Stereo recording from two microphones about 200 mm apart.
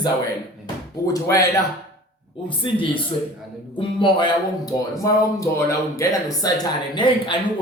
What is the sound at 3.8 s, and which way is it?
Speech, 25° left (ahead or behind).